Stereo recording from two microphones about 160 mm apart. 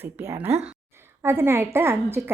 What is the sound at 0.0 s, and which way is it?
A woman's voice, 15° right (ahead or behind).